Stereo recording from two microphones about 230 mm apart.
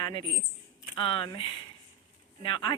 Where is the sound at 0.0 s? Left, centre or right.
Left.